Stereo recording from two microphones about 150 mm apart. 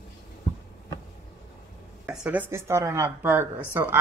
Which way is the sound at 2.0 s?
5° right (ahead or behind).